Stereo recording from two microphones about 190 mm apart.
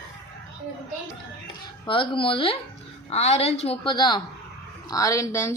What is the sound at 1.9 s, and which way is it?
A woman's voice, 25° left (ahead or behind).